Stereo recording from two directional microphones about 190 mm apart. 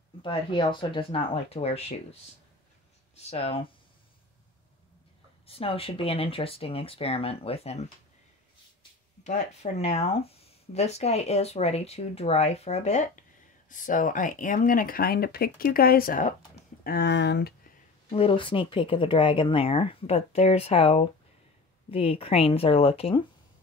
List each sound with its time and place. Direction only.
0.2 s speech: 25° left (ahead or behind)
3.2 s speech: 30° left (ahead or behind)
5.5 s speech: 30° left (ahead or behind)
9.2 s speech: 35° left (ahead or behind)
16.8 s speech: 60° left (ahead or behind)
18.1 s speech: 30° left (ahead or behind)